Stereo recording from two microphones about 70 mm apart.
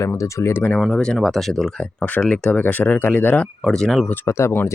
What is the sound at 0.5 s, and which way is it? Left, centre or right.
Speech, left.